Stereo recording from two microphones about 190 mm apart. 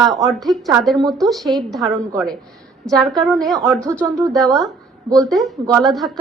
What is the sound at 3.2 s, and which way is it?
A woman's voice, centre (ahead or behind).